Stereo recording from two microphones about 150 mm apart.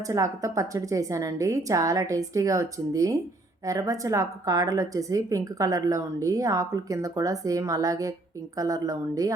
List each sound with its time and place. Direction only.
0.1 s a woman's voice: 20° right (ahead or behind)